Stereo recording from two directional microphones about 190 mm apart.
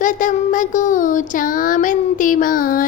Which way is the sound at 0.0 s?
45° left (ahead or behind).